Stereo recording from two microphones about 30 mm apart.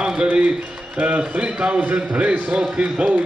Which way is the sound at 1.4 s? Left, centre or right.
Right.